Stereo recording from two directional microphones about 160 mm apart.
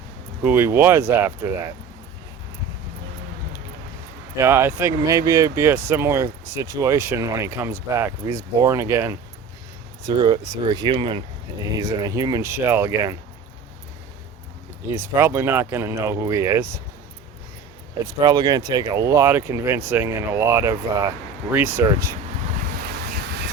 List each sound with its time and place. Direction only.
0.4 s speech: 15° right (ahead or behind)
4.4 s speech: 15° right (ahead or behind); by 11.2 s 30° right (ahead or behind)
11.8 s speech: 20° right (ahead or behind)
14.8 s speech: 15° right (ahead or behind)
18.0 s speech: 25° right (ahead or behind)
22.5 s wind: 65° right (ahead or behind); by 23.5 s 80° right